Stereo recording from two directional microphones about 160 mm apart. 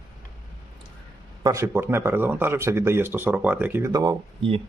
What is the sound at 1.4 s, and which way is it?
Speech, 20° right (ahead or behind).